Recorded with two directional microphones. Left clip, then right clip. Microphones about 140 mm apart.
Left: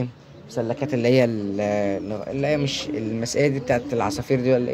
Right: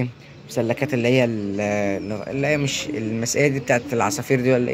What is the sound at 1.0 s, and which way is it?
Speech, 20° left (ahead or behind).